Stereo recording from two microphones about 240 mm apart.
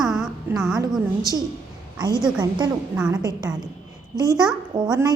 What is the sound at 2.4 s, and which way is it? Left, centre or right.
A woman's voice, centre.